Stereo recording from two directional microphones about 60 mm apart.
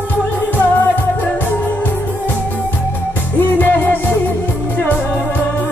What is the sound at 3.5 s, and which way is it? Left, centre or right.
Music, left.